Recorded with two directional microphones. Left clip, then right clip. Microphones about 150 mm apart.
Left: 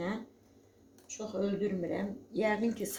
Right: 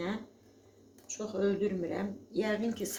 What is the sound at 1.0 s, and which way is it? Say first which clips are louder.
Speech: right 3 dB; 25° left (ahead or behind).